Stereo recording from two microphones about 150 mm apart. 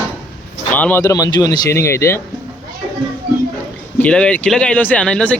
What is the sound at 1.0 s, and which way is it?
Speech, 25° left (ahead or behind).